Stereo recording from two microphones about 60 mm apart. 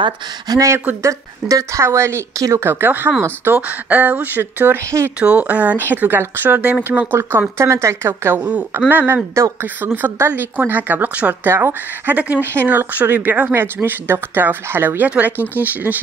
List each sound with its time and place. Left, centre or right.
0.5 s speech: right
2.3 s speech: right
2.6 s speech: right
3.5 s speech: right
5.2 s speech: right
8.1 s speech: right
8.4 s speech: right
8.7 s speech: right
9.6 s speech: right
11.4 s speech: right
12.1 s speech: right